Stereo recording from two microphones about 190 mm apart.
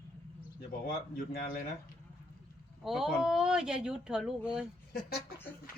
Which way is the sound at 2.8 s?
Centre (ahead or behind).